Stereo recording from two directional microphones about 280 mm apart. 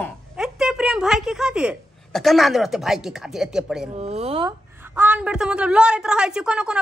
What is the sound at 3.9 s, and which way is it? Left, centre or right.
Speech, right.